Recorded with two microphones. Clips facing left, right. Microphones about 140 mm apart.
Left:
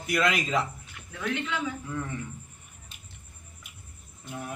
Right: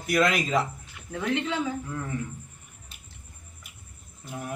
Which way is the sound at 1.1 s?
30° right (ahead or behind).